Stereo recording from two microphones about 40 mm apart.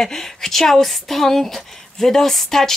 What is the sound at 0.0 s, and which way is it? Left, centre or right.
A woman's voice, centre.